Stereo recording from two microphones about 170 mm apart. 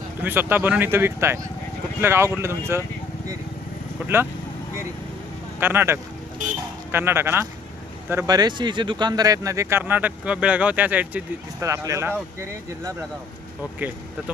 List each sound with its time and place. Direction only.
0.2 s speech: 10° right (ahead or behind)
4.0 s speech: 15° right (ahead or behind)
5.5 s speech: 15° right (ahead or behind)